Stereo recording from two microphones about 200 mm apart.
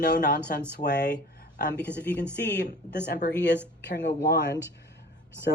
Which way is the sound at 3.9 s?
60° left (ahead or behind).